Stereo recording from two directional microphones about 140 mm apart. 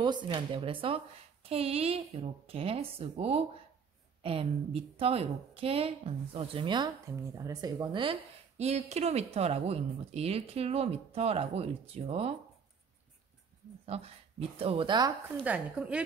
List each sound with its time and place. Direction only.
0.0 s a woman's voice: 35° right (ahead or behind)
8.5 s speech: 50° right (ahead or behind)
13.8 s speech: 45° right (ahead or behind); by 15.1 s 30° right (ahead or behind)
15.4 s speech: 10° right (ahead or behind)